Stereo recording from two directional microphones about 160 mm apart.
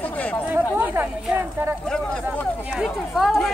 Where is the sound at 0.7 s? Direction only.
10° right (ahead or behind).